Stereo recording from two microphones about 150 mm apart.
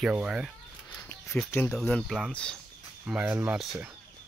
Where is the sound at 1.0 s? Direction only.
20° left (ahead or behind).